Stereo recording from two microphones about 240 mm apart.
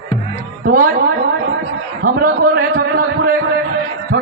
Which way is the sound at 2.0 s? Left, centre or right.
Right.